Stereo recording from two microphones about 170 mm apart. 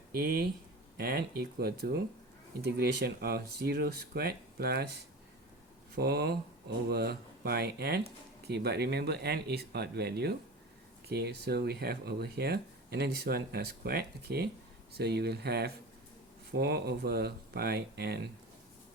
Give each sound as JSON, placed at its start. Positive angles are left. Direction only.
{"t": 0.2, "sound": "speech", "side_deg": -65}
{"t": 6.0, "sound": "speech", "side_deg": -70}